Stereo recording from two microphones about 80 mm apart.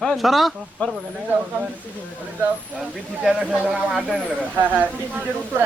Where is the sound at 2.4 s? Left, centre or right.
Centre.